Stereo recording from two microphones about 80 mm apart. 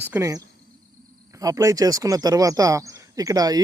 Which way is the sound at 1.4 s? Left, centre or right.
Right.